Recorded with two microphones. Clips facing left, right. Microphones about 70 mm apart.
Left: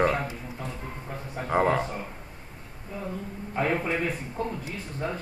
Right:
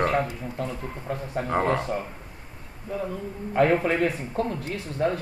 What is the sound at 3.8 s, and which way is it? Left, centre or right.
Speech, right.